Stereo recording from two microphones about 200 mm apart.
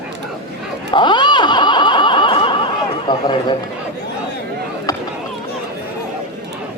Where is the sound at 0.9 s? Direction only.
25° left (ahead or behind).